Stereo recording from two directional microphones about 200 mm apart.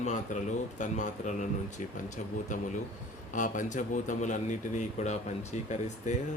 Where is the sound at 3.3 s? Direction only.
40° left (ahead or behind).